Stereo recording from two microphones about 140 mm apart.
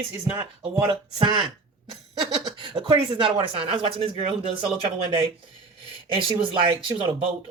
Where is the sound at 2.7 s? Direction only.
35° right (ahead or behind).